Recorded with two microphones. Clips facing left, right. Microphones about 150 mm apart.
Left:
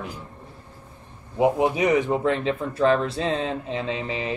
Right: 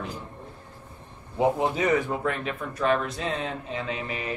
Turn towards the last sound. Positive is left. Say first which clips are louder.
# left 4 dB
turn(degrees=25)  # may be behind; listen again after turning